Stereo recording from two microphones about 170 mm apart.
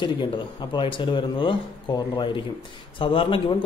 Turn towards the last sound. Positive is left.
turn(degrees=30)  # may be behind; listen again after turning